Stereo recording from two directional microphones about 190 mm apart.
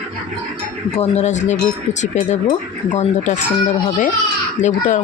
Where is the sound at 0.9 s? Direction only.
35° left (ahead or behind).